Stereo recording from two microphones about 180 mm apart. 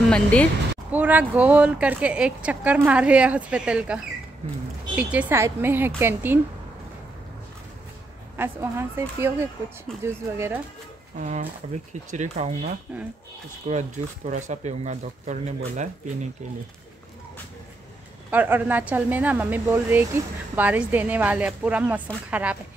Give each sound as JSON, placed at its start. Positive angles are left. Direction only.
{"t": 0.1, "sound": "speech", "side_deg": 5}
{"t": 0.9, "sound": "a woman's voice", "side_deg": -10}
{"t": 8.4, "sound": "a woman's voice", "side_deg": -15}
{"t": 11.2, "sound": "speech", "side_deg": -40}
{"t": 18.3, "sound": "a woman's voice", "side_deg": -10}